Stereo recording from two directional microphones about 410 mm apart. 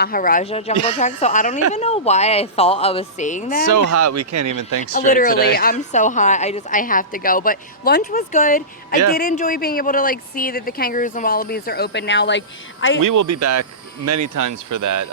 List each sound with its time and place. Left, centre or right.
0.0 s a woman's voice: left
3.7 s speech: right
4.8 s a woman's voice: centre
13.0 s speech: right